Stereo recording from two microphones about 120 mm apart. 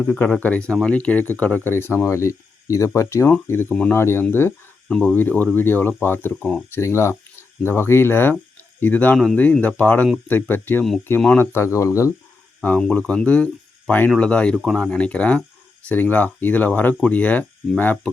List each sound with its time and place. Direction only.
0.1 s speech: 15° left (ahead or behind)
9.1 s speech: centre (ahead or behind)
9.4 s speech: 10° left (ahead or behind)
12.6 s speech: 10° left (ahead or behind)